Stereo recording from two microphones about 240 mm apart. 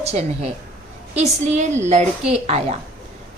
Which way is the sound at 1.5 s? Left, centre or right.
Right.